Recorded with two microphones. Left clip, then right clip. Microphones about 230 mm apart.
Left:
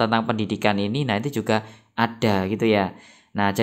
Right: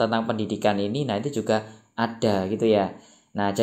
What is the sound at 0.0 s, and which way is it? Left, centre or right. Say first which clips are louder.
Speech: left 2 dB; left.